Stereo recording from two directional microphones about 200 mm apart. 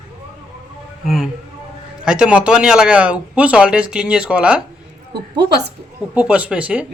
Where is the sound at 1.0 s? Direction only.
Centre (ahead or behind).